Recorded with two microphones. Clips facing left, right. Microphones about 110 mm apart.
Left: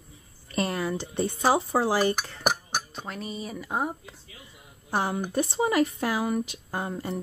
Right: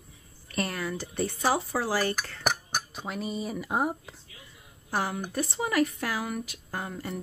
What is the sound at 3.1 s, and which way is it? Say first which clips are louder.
Speech: right 4 dB; centre (ahead or behind).